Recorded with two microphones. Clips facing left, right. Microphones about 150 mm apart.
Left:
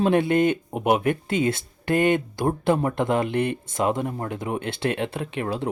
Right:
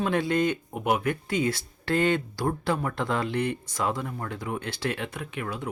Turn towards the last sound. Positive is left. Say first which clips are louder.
# left 6 dB
turn(degrees=30)  # may be behind; listen again after turning